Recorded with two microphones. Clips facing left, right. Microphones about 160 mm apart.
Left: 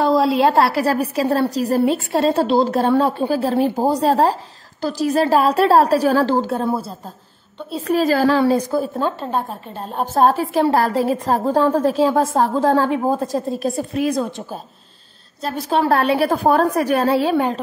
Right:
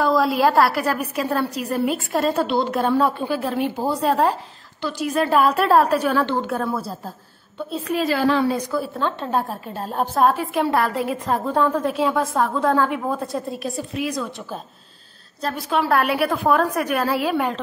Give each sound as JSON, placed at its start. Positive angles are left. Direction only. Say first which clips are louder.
{"t": 0.0, "sound": "a woman's voice", "louder": "left 3 dB", "side_deg": 30}
{"t": 7.7, "sound": "a woman's voice", "louder": "left 5 dB", "side_deg": 40}
{"t": 9.2, "sound": "a woman's voice", "louder": "even", "side_deg": 0}
{"t": 10.1, "sound": "a woman's voice", "louder": "left 4 dB", "side_deg": 35}
{"t": 15.4, "sound": "a woman's voice", "louder": "left 1 dB", "side_deg": 0}
{"t": 15.9, "sound": "a woman's voice", "louder": "left 3 dB", "side_deg": 30}